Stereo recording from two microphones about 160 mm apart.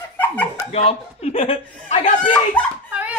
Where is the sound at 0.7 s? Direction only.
40° left (ahead or behind).